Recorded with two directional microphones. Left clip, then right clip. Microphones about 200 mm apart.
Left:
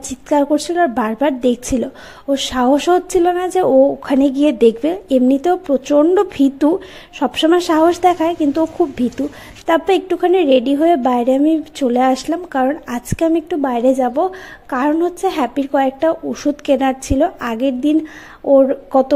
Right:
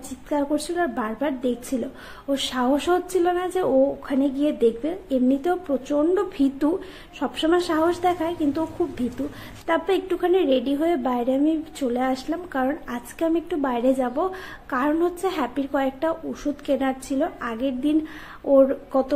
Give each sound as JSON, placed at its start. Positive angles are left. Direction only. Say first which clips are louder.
{"t": 0.3, "sound": "a woman's voice", "louder": "left 9 dB", "side_deg": 35}